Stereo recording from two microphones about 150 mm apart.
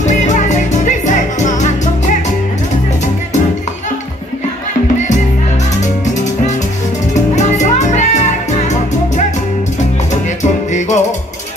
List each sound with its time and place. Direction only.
0.0 s music: 55° left (ahead or behind)
6.0 s music: 55° left (ahead or behind)
10.4 s music: 50° left (ahead or behind)